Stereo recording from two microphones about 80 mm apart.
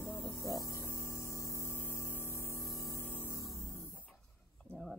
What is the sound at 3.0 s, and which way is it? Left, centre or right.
Music, right.